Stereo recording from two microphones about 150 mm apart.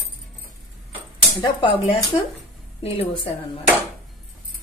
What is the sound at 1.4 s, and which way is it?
A woman's voice, 35° left (ahead or behind).